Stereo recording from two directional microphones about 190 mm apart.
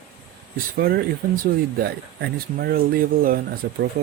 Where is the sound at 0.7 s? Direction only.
55° right (ahead or behind).